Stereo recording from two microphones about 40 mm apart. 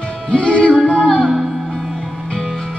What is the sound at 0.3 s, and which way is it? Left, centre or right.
Music, left.